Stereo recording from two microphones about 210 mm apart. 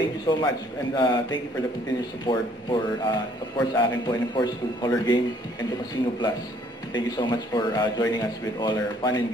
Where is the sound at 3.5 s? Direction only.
20° left (ahead or behind).